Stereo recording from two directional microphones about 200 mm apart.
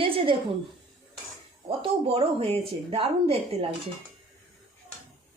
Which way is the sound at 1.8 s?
30° right (ahead or behind).